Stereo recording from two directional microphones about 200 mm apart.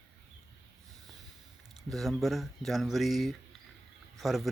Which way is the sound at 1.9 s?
Centre (ahead or behind).